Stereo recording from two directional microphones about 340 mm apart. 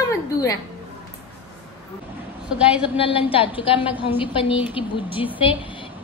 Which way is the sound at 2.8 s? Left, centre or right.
Centre.